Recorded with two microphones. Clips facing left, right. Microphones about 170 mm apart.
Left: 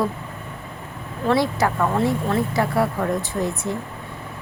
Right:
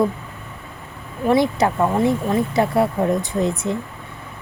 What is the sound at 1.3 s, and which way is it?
Speech, 20° right (ahead or behind).